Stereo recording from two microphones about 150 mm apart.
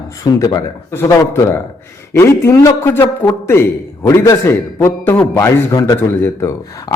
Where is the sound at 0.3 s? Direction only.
25° left (ahead or behind).